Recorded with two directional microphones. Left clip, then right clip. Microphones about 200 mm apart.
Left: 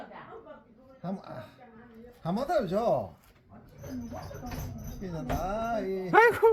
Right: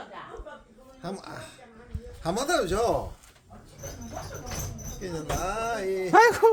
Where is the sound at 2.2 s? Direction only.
45° right (ahead or behind).